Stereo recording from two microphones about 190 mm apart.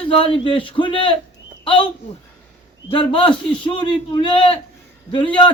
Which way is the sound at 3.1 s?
25° left (ahead or behind).